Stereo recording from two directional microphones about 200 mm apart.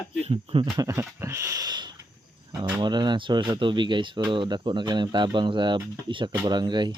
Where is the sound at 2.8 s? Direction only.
20° right (ahead or behind).